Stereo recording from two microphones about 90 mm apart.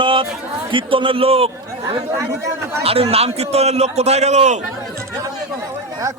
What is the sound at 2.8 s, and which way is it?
Speech, 90° right.